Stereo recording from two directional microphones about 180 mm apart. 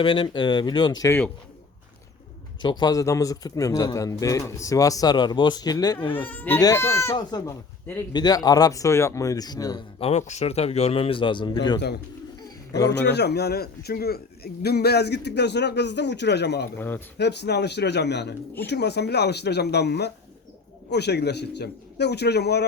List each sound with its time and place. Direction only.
0.0 s speech: 25° left (ahead or behind)
2.6 s speech: 25° left (ahead or behind)
6.2 s speech: 10° left (ahead or behind)
12.9 s a man's voice: 70° left (ahead or behind)
16.7 s speech: 10° left (ahead or behind)
17.2 s a man's voice: 70° left (ahead or behind)